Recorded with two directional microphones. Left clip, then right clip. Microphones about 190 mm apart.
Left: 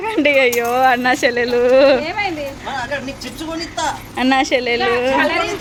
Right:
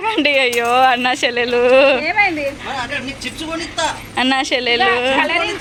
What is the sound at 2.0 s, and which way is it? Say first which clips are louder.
Speech: right 6 dB; 45° right (ahead or behind).